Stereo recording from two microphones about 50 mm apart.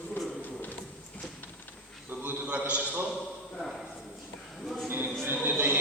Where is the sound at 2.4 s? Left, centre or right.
Right.